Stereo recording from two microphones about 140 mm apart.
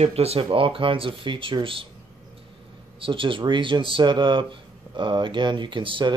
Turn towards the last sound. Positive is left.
turn(degrees=-35)  # may be behind; listen again after turning